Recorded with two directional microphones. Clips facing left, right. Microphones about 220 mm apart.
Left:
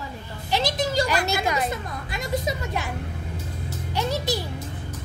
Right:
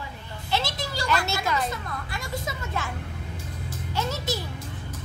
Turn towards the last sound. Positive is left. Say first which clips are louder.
# left 3 dB
turn(degrees=15)  # may be behind; listen again after turning